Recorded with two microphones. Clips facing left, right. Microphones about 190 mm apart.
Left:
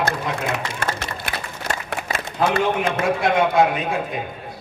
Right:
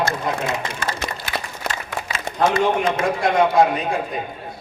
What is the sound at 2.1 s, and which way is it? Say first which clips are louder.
Speech: right 1 dB; 55° left (ahead or behind).